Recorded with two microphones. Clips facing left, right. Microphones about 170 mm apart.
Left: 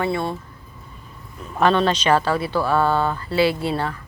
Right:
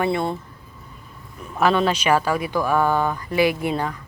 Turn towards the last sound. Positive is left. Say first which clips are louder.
# even
turn(degrees=-15)  # may be behind; listen again after turning